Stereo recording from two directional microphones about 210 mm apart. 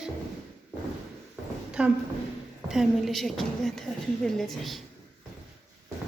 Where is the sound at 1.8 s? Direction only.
5° right (ahead or behind).